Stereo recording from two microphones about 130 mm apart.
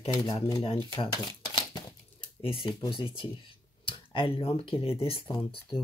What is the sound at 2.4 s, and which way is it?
Speech, 45° left (ahead or behind).